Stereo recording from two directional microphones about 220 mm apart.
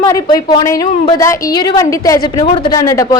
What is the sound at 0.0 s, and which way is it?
A woman's voice, 20° left (ahead or behind).